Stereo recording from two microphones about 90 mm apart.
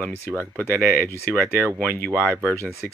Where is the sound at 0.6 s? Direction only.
25° left (ahead or behind).